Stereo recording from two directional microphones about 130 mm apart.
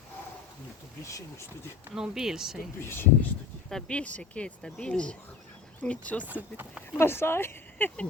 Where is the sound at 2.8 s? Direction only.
15° left (ahead or behind).